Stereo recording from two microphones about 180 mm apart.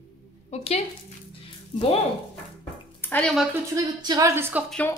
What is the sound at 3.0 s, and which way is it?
Speech, 10° left (ahead or behind).